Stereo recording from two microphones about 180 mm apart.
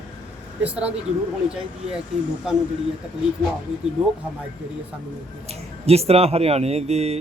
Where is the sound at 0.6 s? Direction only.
5° right (ahead or behind).